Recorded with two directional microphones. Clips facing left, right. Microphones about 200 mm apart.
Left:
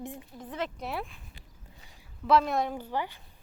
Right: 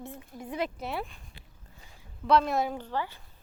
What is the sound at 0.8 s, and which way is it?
Speech, centre (ahead or behind).